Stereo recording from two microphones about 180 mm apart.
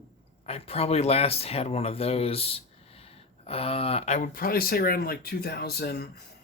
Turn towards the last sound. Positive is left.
turn(degrees=60)  # may be behind; listen again after turning